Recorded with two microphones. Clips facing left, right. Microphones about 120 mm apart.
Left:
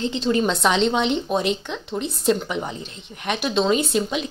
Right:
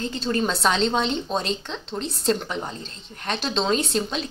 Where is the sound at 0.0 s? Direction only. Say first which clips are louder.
Left 4 dB; 20° left (ahead or behind).